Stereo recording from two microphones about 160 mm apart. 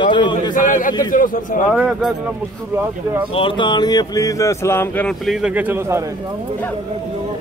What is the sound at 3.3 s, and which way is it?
Speech, 35° left (ahead or behind).